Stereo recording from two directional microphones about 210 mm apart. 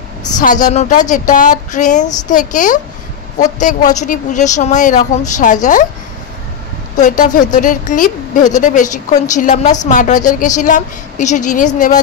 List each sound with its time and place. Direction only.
0.7 s a woman's voice: 35° left (ahead or behind)
7.0 s a woman's voice: 40° left (ahead or behind)